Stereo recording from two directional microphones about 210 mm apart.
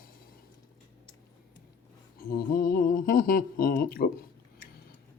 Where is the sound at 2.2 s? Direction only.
45° left (ahead or behind).